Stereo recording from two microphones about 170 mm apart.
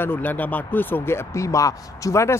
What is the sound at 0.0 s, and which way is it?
Speech, 10° left (ahead or behind).